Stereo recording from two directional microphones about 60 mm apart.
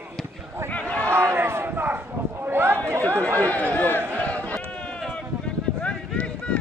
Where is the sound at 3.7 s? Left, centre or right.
Left.